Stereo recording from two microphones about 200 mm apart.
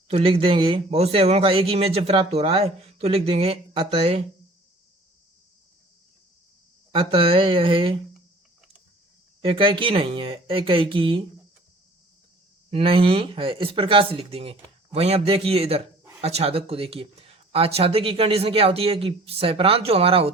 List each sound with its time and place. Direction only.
0.1 s speech: 30° right (ahead or behind)
6.9 s speech: 25° right (ahead or behind)
9.4 s speech: 25° right (ahead or behind)
12.7 s speech: 25° right (ahead or behind)